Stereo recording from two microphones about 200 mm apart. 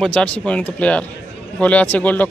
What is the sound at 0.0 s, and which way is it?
Speech, 5° left (ahead or behind).